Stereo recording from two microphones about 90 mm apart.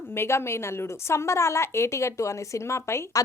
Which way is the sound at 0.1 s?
30° left (ahead or behind).